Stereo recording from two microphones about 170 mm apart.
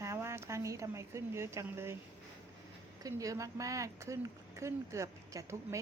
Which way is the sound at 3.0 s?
20° right (ahead or behind).